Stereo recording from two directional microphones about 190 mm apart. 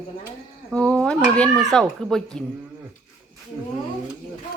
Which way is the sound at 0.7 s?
5° left (ahead or behind).